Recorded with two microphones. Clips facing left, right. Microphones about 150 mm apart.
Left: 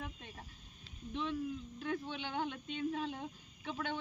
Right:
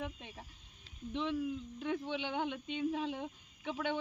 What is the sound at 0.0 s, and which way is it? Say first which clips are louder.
Speech: right 4 dB; 20° right (ahead or behind).